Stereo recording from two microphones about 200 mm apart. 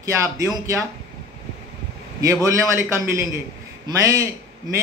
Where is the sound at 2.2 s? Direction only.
15° right (ahead or behind).